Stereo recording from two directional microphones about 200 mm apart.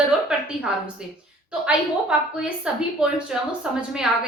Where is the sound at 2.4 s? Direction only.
5° right (ahead or behind).